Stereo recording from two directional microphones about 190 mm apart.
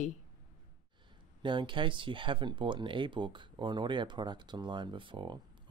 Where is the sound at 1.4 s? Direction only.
25° right (ahead or behind).